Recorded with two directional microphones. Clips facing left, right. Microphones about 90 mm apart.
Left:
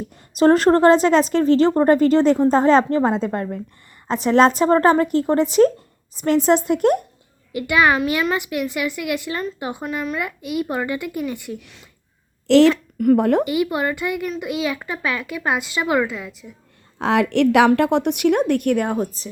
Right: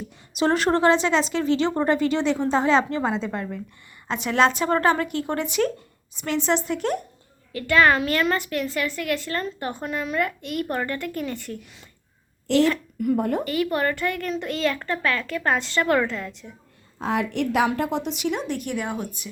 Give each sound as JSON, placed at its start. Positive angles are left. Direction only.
{"t": 0.1, "sound": "a woman's voice", "side_deg": 40}
{"t": 7.5, "sound": "speech", "side_deg": 15}
{"t": 12.5, "sound": "a child's voice", "side_deg": 90}
{"t": 13.4, "sound": "speech", "side_deg": 15}
{"t": 17.0, "sound": "a woman's voice", "side_deg": 75}